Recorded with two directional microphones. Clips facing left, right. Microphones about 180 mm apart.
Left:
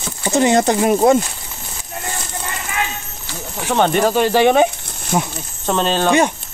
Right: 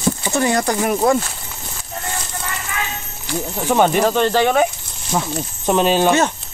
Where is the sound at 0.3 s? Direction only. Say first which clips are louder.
Left 6 dB; 20° left (ahead or behind).